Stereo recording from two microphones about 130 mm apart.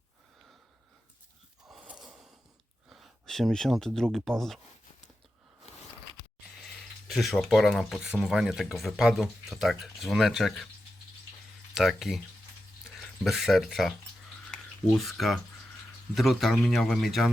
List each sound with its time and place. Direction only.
1.7 s gasp: 5° right (ahead or behind)
2.9 s speech: centre (ahead or behind)
5.7 s a sound: 55° left (ahead or behind)
6.6 s speech: centre (ahead or behind)
11.7 s speech: centre (ahead or behind)